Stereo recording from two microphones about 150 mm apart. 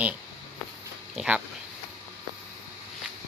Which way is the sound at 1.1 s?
5° right (ahead or behind).